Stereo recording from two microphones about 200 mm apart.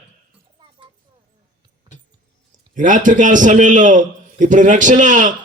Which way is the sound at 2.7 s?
40° right (ahead or behind).